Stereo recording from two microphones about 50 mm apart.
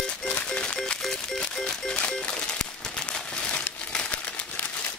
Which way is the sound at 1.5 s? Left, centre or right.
Centre.